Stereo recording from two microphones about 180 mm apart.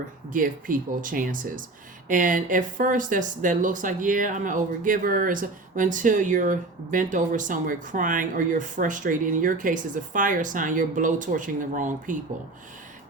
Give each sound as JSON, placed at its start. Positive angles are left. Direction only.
{"t": 0.3, "sound": "speech", "side_deg": -50}